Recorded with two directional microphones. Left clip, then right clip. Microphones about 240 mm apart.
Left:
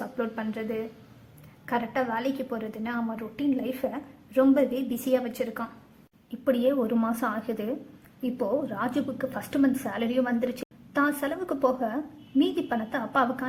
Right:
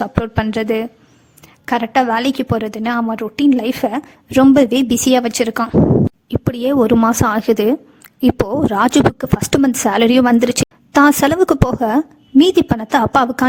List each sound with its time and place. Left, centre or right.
0.0 s a woman's voice: right